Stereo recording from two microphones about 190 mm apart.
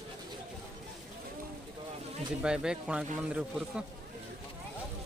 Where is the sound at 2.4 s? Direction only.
5° right (ahead or behind).